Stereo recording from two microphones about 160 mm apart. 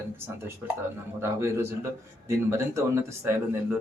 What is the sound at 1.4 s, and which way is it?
A man's voice, 20° right (ahead or behind).